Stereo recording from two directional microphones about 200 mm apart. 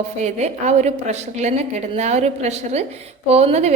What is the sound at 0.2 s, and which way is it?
A woman's voice, 35° right (ahead or behind).